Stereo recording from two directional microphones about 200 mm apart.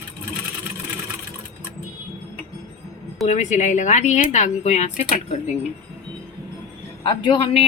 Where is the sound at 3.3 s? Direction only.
35° left (ahead or behind).